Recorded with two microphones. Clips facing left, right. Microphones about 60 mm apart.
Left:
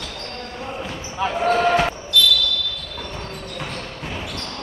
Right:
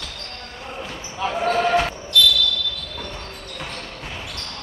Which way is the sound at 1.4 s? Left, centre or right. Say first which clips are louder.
Left 2 dB; centre.